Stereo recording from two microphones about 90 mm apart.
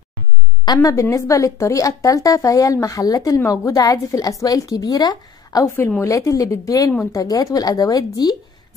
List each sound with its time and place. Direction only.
0.7 s speech: 35° left (ahead or behind)